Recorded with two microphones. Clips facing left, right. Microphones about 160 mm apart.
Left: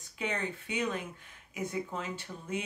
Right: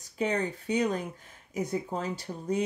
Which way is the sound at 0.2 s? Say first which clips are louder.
Right 6 dB; 40° right (ahead or behind).